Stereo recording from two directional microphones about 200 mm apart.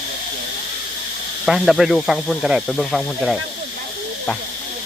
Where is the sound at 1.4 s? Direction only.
Centre (ahead or behind).